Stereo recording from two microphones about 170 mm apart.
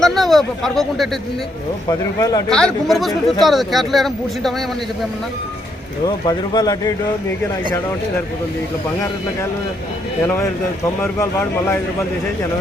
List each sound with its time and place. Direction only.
0.0 s speech: centre (ahead or behind)
1.9 s speech: 20° left (ahead or behind)
2.5 s speech: 5° left (ahead or behind)
6.2 s speech: 25° left (ahead or behind)
11.0 s speech: 15° left (ahead or behind)